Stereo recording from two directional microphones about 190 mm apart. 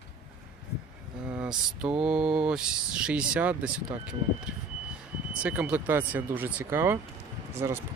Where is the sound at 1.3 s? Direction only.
5° right (ahead or behind).